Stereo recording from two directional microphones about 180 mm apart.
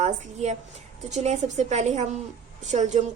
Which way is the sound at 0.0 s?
40° right (ahead or behind).